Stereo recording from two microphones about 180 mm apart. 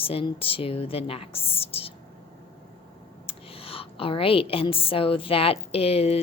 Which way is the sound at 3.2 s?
30° left (ahead or behind).